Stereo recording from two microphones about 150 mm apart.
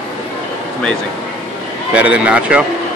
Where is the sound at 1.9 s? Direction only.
10° right (ahead or behind).